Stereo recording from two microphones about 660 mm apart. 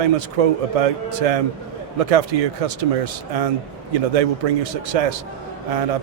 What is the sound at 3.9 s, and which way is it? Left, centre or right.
A man's voice, right.